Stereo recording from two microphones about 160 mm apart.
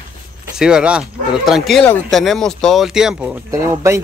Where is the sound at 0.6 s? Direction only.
5° right (ahead or behind).